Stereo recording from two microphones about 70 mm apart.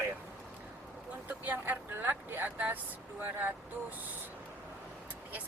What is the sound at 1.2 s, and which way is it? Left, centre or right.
Speech, right.